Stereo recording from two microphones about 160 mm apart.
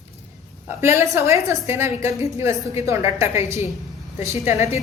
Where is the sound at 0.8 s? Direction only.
15° right (ahead or behind).